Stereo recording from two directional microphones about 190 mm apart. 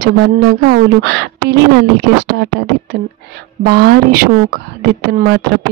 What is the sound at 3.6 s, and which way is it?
Speech, 55° right (ahead or behind).